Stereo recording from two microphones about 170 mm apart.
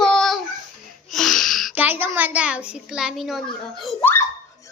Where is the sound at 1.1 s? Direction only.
Centre (ahead or behind).